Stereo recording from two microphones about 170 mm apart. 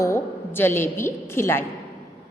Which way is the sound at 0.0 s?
15° left (ahead or behind).